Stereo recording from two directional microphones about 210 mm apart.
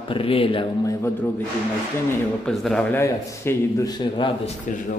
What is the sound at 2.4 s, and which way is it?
A man's voice, centre (ahead or behind).